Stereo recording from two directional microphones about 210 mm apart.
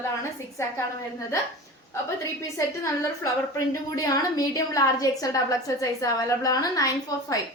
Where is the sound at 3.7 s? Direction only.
15° left (ahead or behind).